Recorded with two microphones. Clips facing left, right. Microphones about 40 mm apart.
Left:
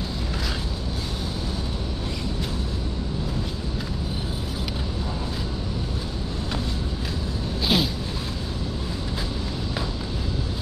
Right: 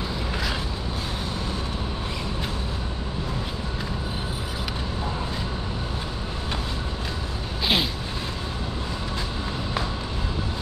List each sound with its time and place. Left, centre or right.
7.6 s vehicle: right